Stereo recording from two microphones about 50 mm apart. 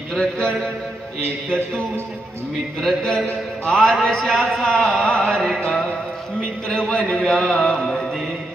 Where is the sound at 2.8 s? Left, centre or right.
Centre.